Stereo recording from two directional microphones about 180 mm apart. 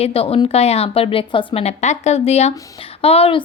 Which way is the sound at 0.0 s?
35° left (ahead or behind).